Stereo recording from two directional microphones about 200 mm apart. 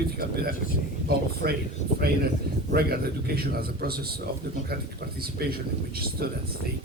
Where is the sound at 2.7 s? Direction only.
50° right (ahead or behind).